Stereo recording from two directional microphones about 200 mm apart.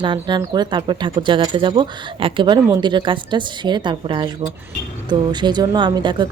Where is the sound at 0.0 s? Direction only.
25° right (ahead or behind).